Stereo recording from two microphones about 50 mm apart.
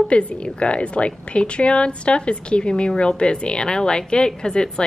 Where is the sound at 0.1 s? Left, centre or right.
Left.